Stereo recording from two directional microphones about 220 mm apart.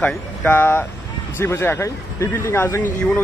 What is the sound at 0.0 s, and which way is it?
Speech, 5° left (ahead or behind).